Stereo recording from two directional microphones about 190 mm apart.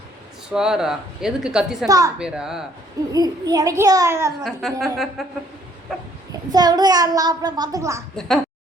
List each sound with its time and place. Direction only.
0.5 s speech: 5° right (ahead or behind)
1.9 s a child's voice: 15° right (ahead or behind)
2.1 s speech: 5° right (ahead or behind)
3.1 s a child's voice: 20° right (ahead or behind)
4.4 s speech: centre (ahead or behind)
6.5 s a child's voice: 20° right (ahead or behind)